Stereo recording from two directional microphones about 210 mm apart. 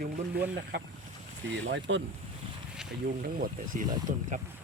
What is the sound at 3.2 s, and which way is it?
Speech, 45° right (ahead or behind).